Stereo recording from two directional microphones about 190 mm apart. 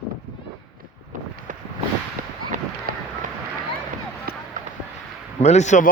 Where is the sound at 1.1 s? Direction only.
40° right (ahead or behind).